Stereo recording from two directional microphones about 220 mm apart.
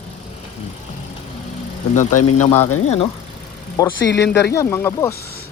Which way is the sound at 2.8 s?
30° left (ahead or behind).